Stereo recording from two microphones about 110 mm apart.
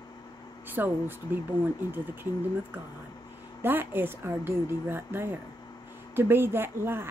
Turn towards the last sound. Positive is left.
turn(degrees=-20)  # may be behind; listen again after turning